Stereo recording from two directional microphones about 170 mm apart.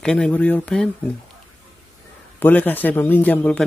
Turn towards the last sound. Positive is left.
turn(degrees=10)  # may be behind; listen again after turning